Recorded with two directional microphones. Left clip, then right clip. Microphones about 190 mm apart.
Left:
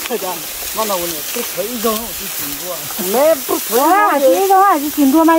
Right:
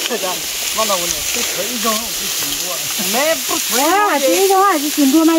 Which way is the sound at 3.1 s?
35° left (ahead or behind).